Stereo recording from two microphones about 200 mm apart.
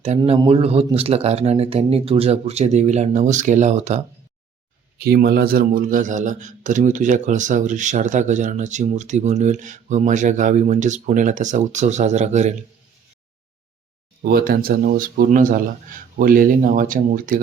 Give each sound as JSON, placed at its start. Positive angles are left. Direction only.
{"t": 0.2, "sound": "a man's voice", "side_deg": -25}
{"t": 4.9, "sound": "a man's voice", "side_deg": -50}
{"t": 14.2, "sound": "speech", "side_deg": -50}